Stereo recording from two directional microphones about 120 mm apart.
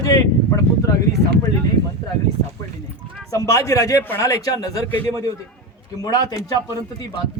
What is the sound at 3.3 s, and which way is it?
A man's voice, 25° left (ahead or behind).